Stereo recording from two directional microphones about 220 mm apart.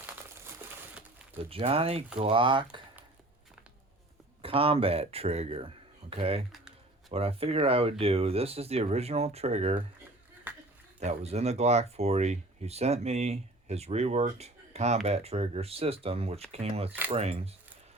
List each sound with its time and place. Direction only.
1.5 s speech: 25° right (ahead or behind)
4.4 s speech: 25° right (ahead or behind)
10.5 s a sound: 5° right (ahead or behind)
11.0 s speech: 30° right (ahead or behind)